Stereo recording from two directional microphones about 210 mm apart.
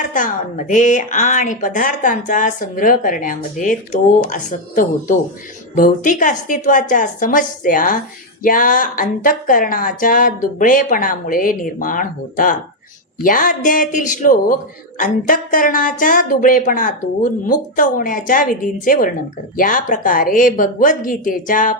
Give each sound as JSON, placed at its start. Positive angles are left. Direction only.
{"t": 0.1, "sound": "speech", "side_deg": 40}